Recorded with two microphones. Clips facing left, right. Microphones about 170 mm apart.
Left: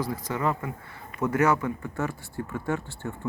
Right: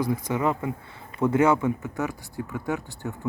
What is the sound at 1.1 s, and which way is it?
Speech, 25° right (ahead or behind).